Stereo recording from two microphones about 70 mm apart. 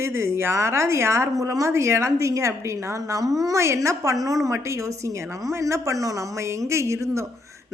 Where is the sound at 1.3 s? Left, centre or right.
Right.